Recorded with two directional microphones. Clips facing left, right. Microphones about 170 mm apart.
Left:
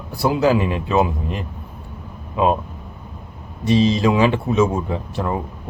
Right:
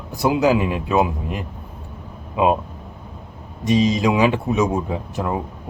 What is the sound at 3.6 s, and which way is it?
Speech, 15° right (ahead or behind).